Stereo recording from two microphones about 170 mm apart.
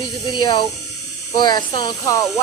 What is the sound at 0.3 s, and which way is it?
Speech, 25° left (ahead or behind).